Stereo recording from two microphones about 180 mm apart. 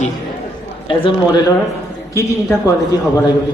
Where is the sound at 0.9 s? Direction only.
30° left (ahead or behind).